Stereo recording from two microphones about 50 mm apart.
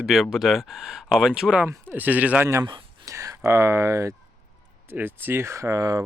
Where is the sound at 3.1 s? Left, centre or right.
Right.